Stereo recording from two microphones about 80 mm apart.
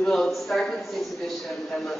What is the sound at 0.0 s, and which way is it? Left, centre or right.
Speech, centre.